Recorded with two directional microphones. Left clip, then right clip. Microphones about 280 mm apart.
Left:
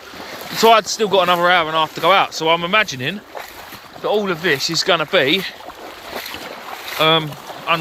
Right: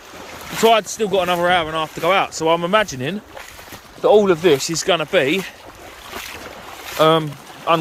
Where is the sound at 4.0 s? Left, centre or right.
Right.